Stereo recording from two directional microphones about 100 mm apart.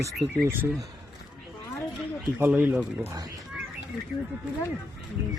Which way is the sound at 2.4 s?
20° right (ahead or behind).